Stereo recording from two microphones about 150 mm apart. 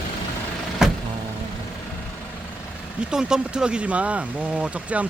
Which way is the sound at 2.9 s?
5° right (ahead or behind).